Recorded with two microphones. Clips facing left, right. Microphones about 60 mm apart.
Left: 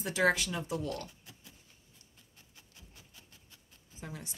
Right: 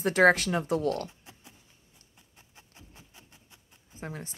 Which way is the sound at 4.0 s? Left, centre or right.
Right.